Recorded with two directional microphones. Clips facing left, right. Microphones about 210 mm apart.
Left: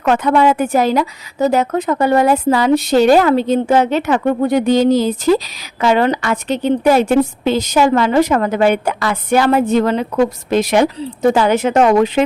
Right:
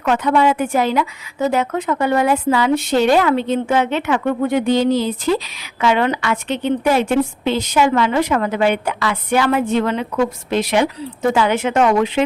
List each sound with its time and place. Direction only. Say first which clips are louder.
0.0 s speech: left 3 dB; 45° left (ahead or behind)